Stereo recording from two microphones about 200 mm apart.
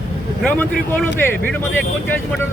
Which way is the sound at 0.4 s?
5° left (ahead or behind).